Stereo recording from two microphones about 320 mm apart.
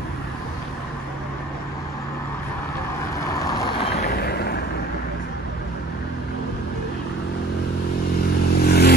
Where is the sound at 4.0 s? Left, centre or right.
Left.